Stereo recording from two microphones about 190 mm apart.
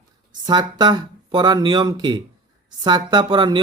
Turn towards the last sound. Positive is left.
turn(degrees=-25)  # may be behind; listen again after turning